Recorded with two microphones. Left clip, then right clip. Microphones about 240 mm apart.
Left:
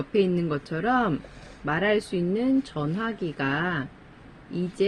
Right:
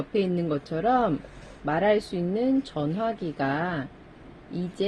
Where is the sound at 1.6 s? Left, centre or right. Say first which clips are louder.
Right 1 dB; left.